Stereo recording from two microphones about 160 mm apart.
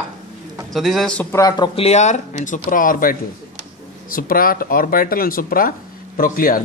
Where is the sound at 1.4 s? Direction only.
25° left (ahead or behind).